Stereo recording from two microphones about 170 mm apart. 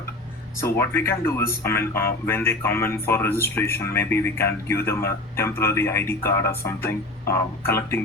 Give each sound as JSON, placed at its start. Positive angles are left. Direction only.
{"t": 0.6, "sound": "speech", "side_deg": 15}